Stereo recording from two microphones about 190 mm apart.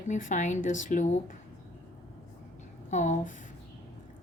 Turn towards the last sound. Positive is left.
turn(degrees=40)  # may be behind; listen again after turning